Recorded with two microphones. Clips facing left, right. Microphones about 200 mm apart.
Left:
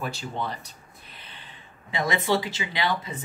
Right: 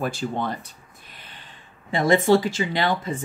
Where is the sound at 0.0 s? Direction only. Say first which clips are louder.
Right 5 dB; 50° right (ahead or behind).